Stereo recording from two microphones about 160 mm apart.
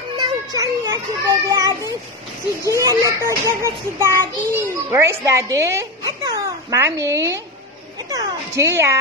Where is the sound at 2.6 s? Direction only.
20° right (ahead or behind).